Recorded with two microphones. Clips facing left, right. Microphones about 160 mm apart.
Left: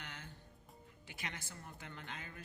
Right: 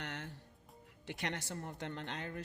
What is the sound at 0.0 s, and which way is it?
Music, 70° right (ahead or behind).